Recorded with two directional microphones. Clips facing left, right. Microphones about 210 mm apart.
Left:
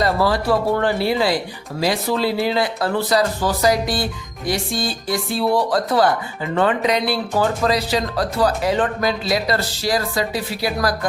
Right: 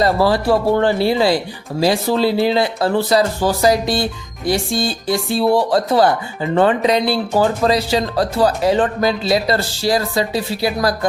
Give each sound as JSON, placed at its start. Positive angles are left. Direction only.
{"t": 0.0, "sound": "speech", "side_deg": -30}